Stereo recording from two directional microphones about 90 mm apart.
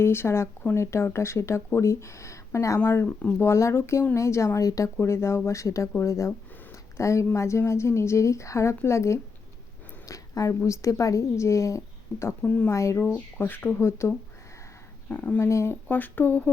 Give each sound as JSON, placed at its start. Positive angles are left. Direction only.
{"t": 0.0, "sound": "speech", "side_deg": 25}
{"t": 12.4, "sound": "speech", "side_deg": 15}
{"t": 12.7, "sound": "speech", "side_deg": 35}
{"t": 14.0, "sound": "speech", "side_deg": 30}
{"t": 15.1, "sound": "speech", "side_deg": 15}
{"t": 15.4, "sound": "speech", "side_deg": 30}